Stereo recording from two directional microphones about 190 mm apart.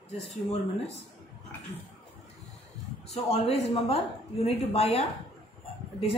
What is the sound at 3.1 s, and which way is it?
A woman's voice, 30° left (ahead or behind).